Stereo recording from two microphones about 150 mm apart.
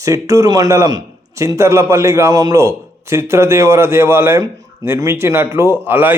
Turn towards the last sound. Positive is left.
turn(degrees=-15)  # may be behind; listen again after turning